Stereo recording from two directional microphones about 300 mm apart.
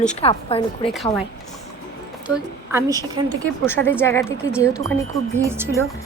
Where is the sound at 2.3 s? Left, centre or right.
Centre.